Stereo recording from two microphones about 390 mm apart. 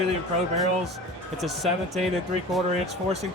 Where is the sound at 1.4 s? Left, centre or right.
Centre.